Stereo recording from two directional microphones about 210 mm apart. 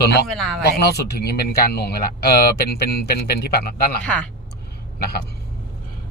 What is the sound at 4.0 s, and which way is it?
Speech, 5° left (ahead or behind).